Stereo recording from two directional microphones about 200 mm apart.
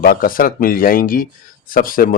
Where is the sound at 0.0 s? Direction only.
45° left (ahead or behind).